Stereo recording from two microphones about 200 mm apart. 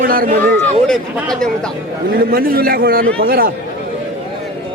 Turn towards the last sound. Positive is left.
turn(degrees=-50)  # may be behind; listen again after turning